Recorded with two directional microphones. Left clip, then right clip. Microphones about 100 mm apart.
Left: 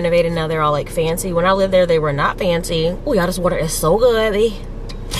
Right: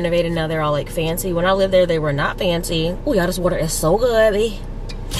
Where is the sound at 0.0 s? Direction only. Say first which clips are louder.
Left 3 dB; 15° left (ahead or behind).